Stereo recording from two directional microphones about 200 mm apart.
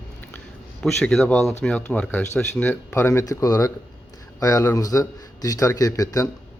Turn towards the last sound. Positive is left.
turn(degrees=15)  # may be behind; listen again after turning